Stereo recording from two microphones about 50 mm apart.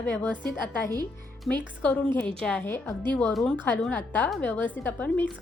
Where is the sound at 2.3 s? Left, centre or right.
Centre.